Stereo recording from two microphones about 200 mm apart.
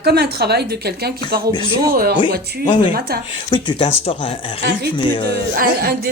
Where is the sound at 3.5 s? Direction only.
25° left (ahead or behind).